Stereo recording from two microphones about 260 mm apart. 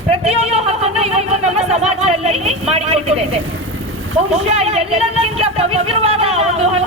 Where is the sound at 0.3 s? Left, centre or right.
Right.